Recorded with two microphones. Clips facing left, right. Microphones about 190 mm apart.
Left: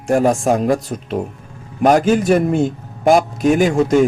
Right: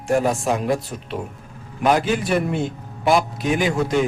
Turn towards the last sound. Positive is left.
turn(degrees=45)  # may be behind; listen again after turning